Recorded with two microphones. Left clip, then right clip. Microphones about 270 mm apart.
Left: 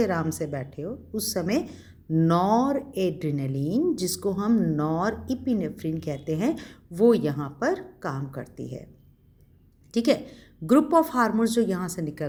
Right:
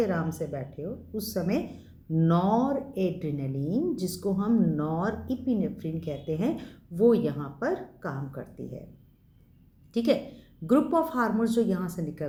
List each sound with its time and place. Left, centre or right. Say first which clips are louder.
0.0 s speech: left 3 dB; left
9.9 s speech: left 2 dB; left